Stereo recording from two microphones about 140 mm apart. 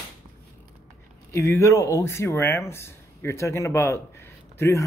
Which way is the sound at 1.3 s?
20° left (ahead or behind).